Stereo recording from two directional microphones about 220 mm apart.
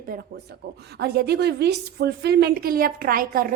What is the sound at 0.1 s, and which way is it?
A woman's voice, 40° right (ahead or behind).